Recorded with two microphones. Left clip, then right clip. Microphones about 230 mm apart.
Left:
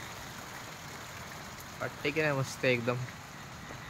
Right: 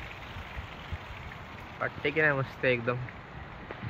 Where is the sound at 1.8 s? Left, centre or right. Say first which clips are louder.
Right 5 dB; centre.